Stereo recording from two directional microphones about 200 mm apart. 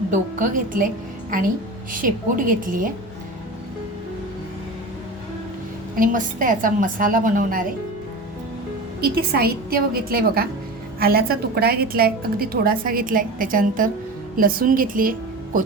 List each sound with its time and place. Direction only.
0.1 s a woman's voice: 40° right (ahead or behind)
1.9 s a woman's voice: 45° right (ahead or behind)
6.0 s a woman's voice: 40° right (ahead or behind)
9.0 s a woman's voice: 50° right (ahead or behind)